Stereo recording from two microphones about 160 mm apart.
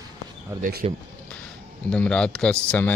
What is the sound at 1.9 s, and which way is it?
Speech, 5° left (ahead or behind).